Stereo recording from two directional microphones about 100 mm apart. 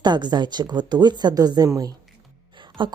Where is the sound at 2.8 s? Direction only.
55° right (ahead or behind).